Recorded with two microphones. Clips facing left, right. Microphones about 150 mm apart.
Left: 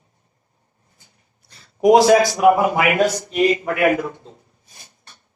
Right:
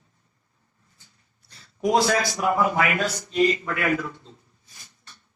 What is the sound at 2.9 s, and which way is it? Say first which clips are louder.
A man's voice: left 9 dB; 65° left (ahead or behind).